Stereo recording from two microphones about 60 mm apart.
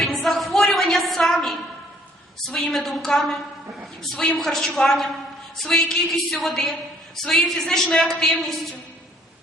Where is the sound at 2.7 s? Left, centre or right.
Centre.